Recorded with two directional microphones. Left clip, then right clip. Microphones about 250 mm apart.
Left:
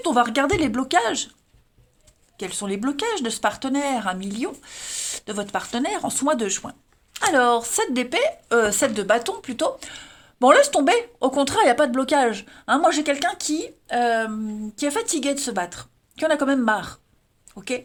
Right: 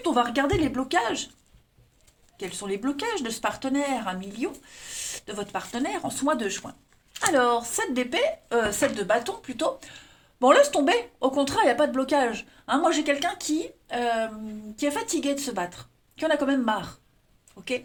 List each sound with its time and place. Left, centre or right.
0.0 s speech: left
2.4 s speech: left